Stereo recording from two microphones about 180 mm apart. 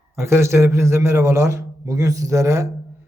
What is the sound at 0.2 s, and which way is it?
A man's voice, 15° right (ahead or behind).